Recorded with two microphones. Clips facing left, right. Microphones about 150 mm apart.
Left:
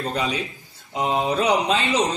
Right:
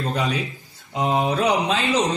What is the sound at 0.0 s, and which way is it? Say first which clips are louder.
Speech: right 1 dB; centre (ahead or behind).